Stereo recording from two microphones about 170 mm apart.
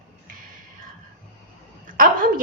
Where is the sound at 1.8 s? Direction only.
55° right (ahead or behind).